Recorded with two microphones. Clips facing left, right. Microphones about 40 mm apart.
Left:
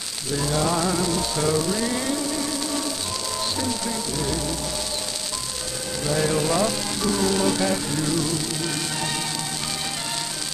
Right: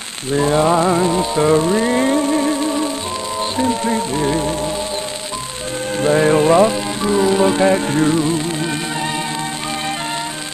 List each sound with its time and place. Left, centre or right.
0.3 s music: right
5.9 s music: right